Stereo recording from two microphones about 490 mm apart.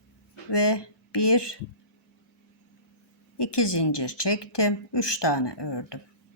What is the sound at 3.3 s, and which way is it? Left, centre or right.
A woman's voice, left.